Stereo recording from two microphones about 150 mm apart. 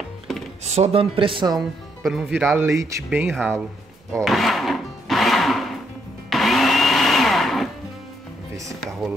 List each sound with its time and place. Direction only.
0.3 s music: centre (ahead or behind)
0.7 s speech: 40° right (ahead or behind)
1.6 s speech: centre (ahead or behind)
2.6 s speech: 20° right (ahead or behind)
3.3 s speech: centre (ahead or behind)
4.1 s music: centre (ahead or behind)
6.3 s blender: centre (ahead or behind)